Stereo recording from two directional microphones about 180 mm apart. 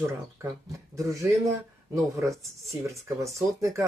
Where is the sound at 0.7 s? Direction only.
15° right (ahead or behind).